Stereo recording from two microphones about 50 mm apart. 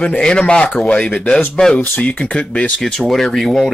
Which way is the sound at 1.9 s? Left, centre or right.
Left.